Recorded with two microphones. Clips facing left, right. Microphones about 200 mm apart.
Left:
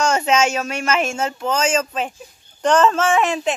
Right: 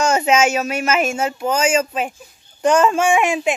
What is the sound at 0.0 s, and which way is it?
Speech, 5° right (ahead or behind).